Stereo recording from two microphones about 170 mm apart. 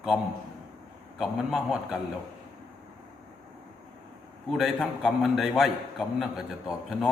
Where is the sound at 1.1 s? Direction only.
Centre (ahead or behind).